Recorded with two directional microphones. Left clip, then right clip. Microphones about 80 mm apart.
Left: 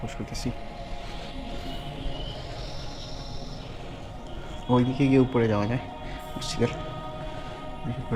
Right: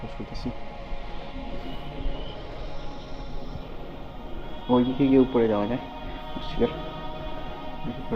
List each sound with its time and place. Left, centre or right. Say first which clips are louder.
4.8 s a man's voice: right 2 dB; right